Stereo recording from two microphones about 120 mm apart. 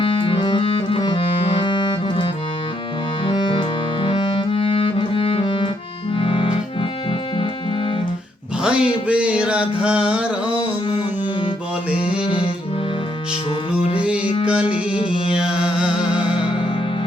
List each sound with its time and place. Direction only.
0.0 s music: 45° left (ahead or behind)
6.1 s accordion: 50° left (ahead or behind)
8.6 s music: 10° right (ahead or behind)
10.8 s music: 45° left (ahead or behind)
14.4 s music: 10° right (ahead or behind)